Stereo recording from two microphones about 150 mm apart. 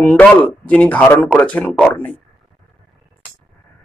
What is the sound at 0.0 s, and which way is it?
Speech, 10° left (ahead or behind).